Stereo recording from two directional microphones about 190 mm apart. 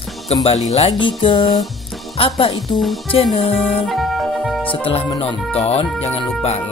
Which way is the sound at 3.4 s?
30° left (ahead or behind).